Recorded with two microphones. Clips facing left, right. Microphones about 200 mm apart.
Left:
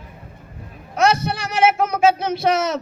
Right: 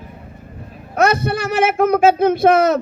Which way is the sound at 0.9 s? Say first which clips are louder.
Right 2 dB; 55° right (ahead or behind).